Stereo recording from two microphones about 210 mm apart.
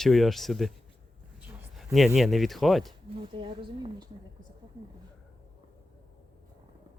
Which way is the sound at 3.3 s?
25° right (ahead or behind).